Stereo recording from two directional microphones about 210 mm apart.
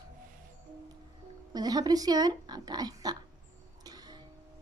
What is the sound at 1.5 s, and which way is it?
A woman's voice, 20° right (ahead or behind).